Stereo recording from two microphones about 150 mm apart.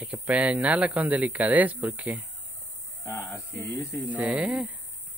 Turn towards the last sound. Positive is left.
turn(degrees=-10)  # may be behind; listen again after turning